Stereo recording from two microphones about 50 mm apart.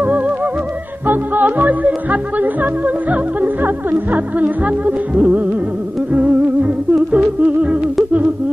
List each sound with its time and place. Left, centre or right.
1.0 s music: right